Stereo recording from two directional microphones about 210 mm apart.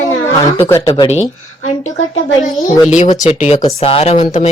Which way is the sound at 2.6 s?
35° left (ahead or behind).